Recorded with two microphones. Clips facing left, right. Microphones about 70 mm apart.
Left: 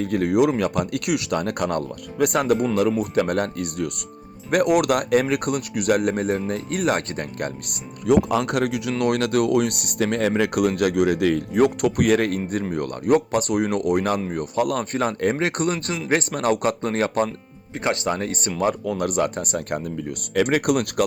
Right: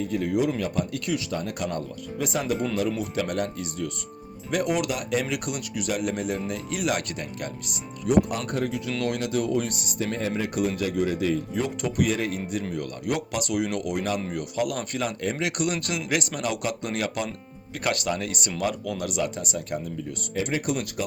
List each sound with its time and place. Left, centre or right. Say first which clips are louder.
0.0 s speech: left 6 dB; left
5.2 s speech: left 7 dB; left
8.4 s speech: left 6 dB; left
9.0 s speech: left 7 dB; left